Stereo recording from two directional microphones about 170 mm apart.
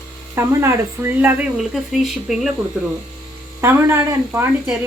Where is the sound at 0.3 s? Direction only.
15° right (ahead or behind).